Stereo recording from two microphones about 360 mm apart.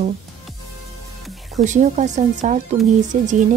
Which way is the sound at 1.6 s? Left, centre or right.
Centre.